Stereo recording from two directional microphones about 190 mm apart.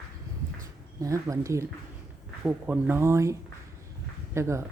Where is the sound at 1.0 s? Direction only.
15° right (ahead or behind).